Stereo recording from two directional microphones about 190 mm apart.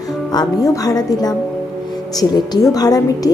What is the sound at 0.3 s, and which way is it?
A woman's voice, 20° left (ahead or behind).